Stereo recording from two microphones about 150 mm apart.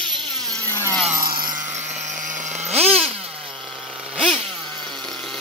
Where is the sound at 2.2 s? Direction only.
55° right (ahead or behind).